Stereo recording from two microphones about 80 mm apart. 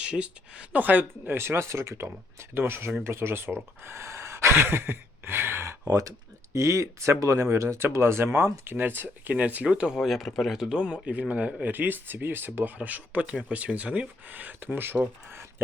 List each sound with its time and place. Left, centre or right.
0.0 s speech: centre; by 5.7 s right
5.9 s speech: right; by 10.0 s centre
10.0 s speech: centre; by 14.9 s right
15.3 s a sound: right